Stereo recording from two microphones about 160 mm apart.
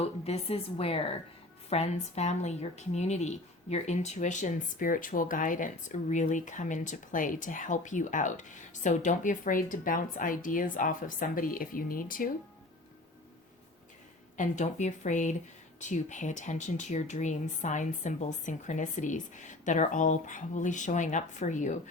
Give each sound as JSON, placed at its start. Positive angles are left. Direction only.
{"t": 0.3, "sound": "a woman's voice", "side_deg": 40}
{"t": 14.3, "sound": "a woman's voice", "side_deg": 50}